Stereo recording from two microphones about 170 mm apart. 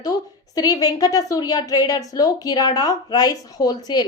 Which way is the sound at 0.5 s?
20° left (ahead or behind).